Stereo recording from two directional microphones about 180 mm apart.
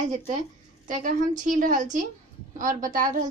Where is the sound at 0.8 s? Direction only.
45° right (ahead or behind).